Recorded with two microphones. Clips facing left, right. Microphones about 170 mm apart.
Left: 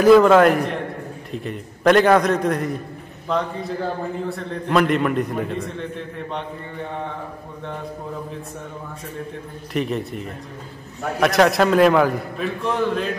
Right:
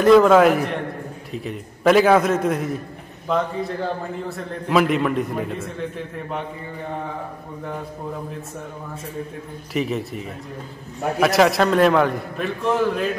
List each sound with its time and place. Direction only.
0.0 s a man's voice: centre (ahead or behind)
9.8 s a man's voice: centre (ahead or behind)